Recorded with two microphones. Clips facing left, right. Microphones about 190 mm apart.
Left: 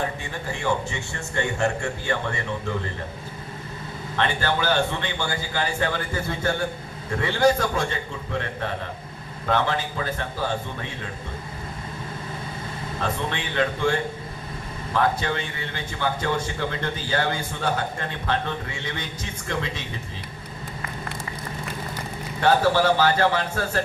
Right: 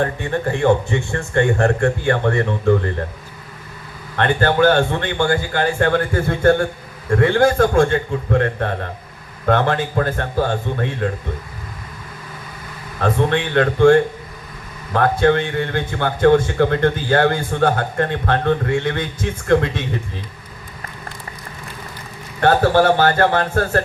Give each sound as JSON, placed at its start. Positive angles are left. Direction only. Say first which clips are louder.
{"t": 0.0, "sound": "a man's voice", "louder": "right 9 dB", "side_deg": -55}
{"t": 4.2, "sound": "a man's voice", "louder": "right 9 dB", "side_deg": -55}
{"t": 13.0, "sound": "a man's voice", "louder": "right 10 dB", "side_deg": -55}
{"t": 22.4, "sound": "a man's voice", "louder": "right 5 dB", "side_deg": -55}